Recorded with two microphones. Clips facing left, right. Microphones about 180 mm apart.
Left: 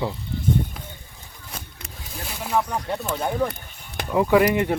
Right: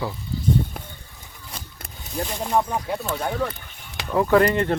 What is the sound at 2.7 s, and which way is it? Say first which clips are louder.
Speech: even; 5° right (ahead or behind).